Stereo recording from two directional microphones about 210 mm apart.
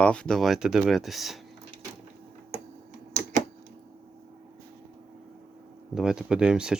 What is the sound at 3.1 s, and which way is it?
Typewriter, 35° right (ahead or behind).